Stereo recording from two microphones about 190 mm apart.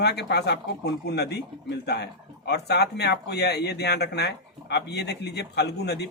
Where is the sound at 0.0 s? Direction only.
60° left (ahead or behind).